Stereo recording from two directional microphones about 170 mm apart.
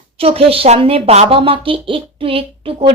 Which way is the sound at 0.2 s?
35° right (ahead or behind).